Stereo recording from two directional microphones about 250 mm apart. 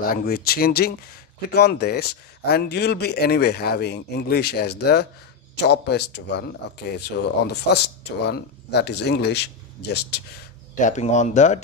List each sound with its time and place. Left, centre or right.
0.0 s speech: left
10.9 s speech: left